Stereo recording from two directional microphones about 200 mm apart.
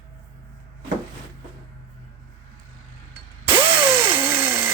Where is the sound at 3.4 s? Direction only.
25° right (ahead or behind).